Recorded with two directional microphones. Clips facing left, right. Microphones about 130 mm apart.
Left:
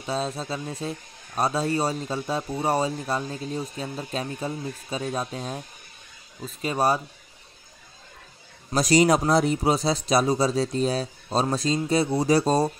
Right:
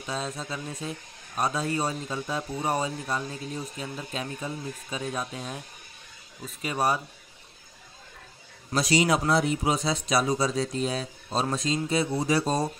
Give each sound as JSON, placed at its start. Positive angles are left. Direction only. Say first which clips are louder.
{"t": 0.0, "sound": "a man's voice", "louder": "left 5 dB", "side_deg": 30}
{"t": 8.7, "sound": "a man's voice", "louder": "left 4 dB", "side_deg": 45}